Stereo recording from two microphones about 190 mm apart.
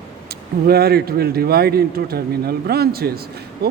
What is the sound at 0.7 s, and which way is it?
Speech, 55° right (ahead or behind).